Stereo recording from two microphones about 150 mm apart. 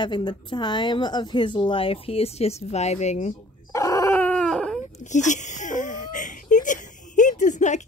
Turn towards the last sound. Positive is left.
turn(degrees=50)  # may be behind; listen again after turning